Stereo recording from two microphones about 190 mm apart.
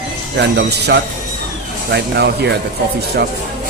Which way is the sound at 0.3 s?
60° right (ahead or behind).